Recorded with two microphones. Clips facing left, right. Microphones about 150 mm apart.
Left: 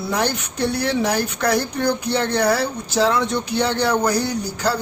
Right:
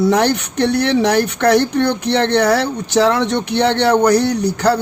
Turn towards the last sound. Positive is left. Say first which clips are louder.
# right 7 dB
turn(degrees=-70)  # may be behind; listen again after turning